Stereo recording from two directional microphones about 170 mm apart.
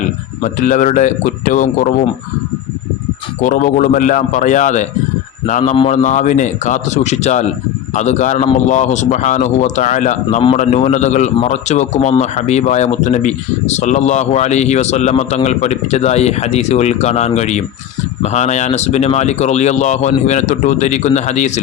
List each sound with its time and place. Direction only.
0.4 s speech: 50° left (ahead or behind)
3.4 s speech: 45° left (ahead or behind)